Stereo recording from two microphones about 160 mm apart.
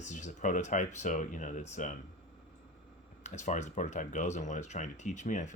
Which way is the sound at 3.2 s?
50° left (ahead or behind).